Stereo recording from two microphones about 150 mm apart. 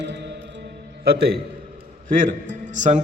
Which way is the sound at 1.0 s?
90° right.